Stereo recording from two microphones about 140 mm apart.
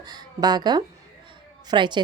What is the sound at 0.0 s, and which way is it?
A woman's voice, 30° right (ahead or behind).